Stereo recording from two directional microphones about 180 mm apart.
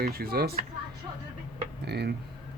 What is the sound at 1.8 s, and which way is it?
Speech, 65° right (ahead or behind).